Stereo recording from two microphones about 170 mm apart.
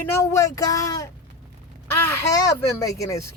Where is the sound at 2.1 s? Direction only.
20° left (ahead or behind).